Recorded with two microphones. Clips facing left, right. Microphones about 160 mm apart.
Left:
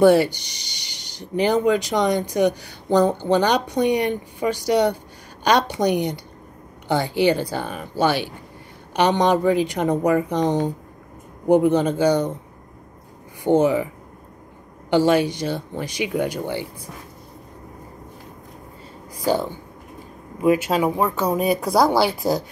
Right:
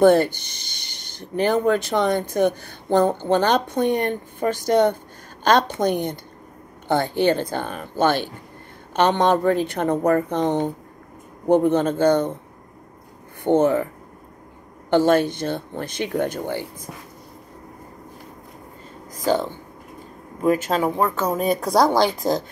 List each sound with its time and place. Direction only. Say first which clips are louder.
0.0 s speech: even; 10° left (ahead or behind)
0.4 s a sound: even; 55° right (ahead or behind)
1.3 s speech: left 1 dB; 15° left (ahead or behind)
5.9 s speech: left 2 dB; 50° right (ahead or behind)
6.9 s speech: even; 10° left (ahead or behind)
13.4 s speech: even; 10° left (ahead or behind)
14.9 s speech: even; 10° left (ahead or behind)
20.3 s speech: left 1 dB; 10° left (ahead or behind)